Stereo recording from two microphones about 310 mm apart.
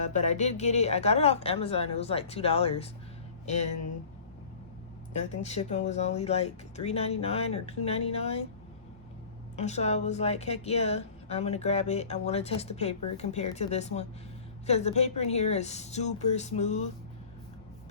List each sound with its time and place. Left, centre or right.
0.0 s a woman's voice: left
5.3 s a woman's voice: left
9.6 s a woman's voice: left